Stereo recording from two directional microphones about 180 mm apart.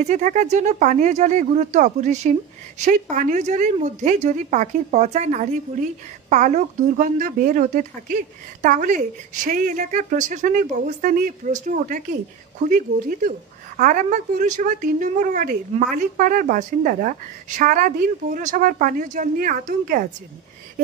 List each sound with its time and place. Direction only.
0.0 s a woman's voice: 40° right (ahead or behind)